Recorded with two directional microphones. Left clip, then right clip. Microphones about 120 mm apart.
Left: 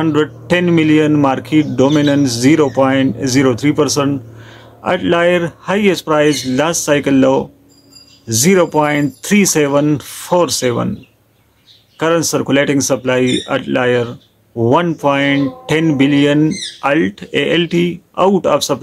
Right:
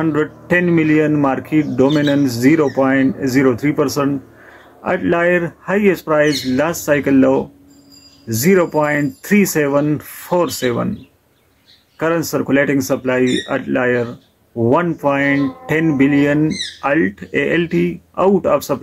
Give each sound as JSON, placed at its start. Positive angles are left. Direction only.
{"t": 0.0, "sound": "speech", "side_deg": 30}
{"t": 2.2, "sound": "speech", "side_deg": 40}
{"t": 12.0, "sound": "speech", "side_deg": 35}